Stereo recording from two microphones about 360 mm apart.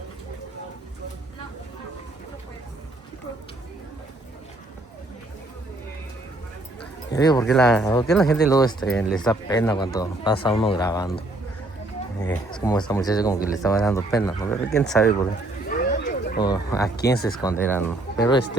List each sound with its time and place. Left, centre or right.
7.1 s speech: centre
12.2 s speech: centre
15.7 s a sound: left
16.4 s speech: centre